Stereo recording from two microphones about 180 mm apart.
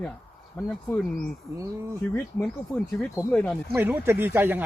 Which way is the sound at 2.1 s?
5° left (ahead or behind).